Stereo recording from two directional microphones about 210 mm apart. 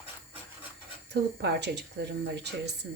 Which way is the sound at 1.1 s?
55° right (ahead or behind).